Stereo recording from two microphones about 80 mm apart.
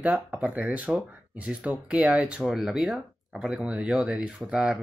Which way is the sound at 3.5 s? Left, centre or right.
Centre.